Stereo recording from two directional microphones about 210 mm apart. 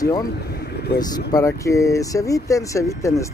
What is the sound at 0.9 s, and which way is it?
Speech, 15° left (ahead or behind).